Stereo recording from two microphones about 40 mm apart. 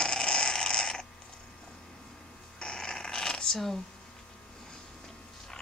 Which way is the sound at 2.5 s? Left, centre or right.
Left.